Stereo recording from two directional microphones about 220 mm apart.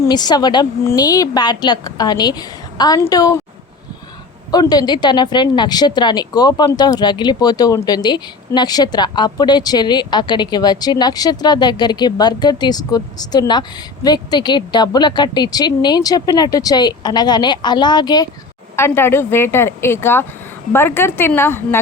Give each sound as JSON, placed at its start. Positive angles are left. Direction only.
{"t": 0.0, "sound": "a woman's voice", "side_deg": 20}
{"t": 4.5, "sound": "a woman's voice", "side_deg": 20}